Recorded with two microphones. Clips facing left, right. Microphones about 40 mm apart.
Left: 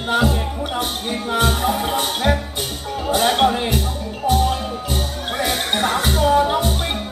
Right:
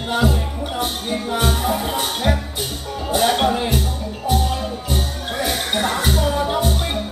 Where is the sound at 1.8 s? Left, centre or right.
Centre.